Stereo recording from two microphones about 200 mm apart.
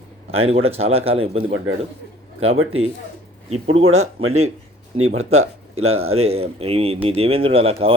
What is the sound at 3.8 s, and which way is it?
Speech, 90° right.